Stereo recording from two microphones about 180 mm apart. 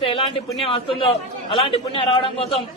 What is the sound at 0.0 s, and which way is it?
A man's voice, 30° left (ahead or behind).